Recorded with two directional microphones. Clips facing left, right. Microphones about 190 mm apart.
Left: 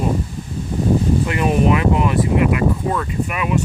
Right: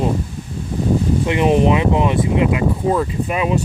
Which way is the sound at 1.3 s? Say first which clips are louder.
Right 4 dB; 20° right (ahead or behind).